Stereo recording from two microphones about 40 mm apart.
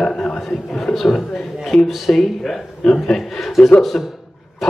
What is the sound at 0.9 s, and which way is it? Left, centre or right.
Speech, centre.